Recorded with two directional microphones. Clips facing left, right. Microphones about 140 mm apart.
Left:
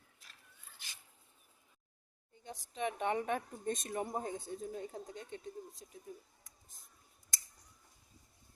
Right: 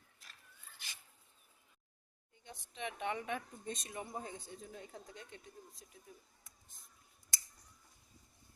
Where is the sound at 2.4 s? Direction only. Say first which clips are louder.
Left 6 dB; 40° left (ahead or behind).